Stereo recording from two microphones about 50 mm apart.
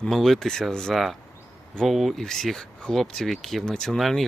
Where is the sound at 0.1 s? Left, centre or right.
Centre.